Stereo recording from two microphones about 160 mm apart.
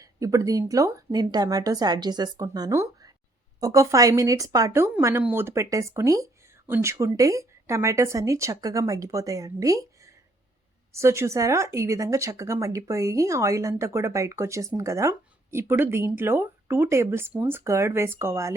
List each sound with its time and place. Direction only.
0.0 s speech: 20° right (ahead or behind)